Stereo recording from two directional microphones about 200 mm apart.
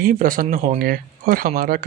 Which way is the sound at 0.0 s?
45° right (ahead or behind).